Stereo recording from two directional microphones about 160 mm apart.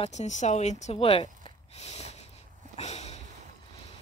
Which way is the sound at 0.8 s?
40° left (ahead or behind).